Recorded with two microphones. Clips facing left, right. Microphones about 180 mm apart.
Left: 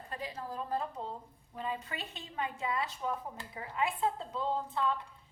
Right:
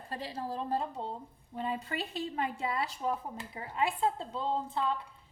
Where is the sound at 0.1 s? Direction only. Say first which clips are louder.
Right 3 dB; 30° right (ahead or behind).